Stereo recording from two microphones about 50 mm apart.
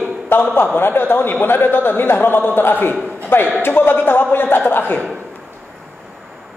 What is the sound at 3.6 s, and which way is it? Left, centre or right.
A man's voice, left.